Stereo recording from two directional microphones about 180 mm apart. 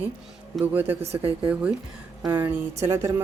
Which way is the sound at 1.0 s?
35° right (ahead or behind).